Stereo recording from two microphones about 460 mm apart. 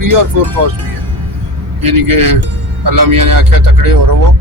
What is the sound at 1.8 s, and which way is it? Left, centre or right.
Speech, right.